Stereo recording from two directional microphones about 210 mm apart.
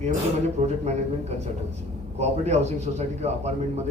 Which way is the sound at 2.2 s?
30° right (ahead or behind).